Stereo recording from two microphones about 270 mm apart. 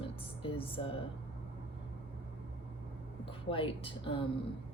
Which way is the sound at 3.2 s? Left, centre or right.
Centre.